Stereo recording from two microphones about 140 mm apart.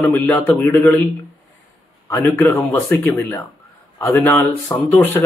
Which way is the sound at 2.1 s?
15° left (ahead or behind).